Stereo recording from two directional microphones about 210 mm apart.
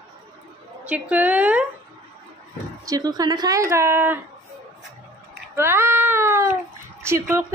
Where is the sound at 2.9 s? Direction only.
20° right (ahead or behind).